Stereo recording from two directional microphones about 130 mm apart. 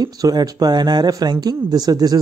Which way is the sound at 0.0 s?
30° right (ahead or behind).